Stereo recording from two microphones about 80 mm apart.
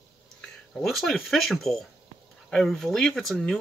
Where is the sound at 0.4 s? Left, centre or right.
Centre.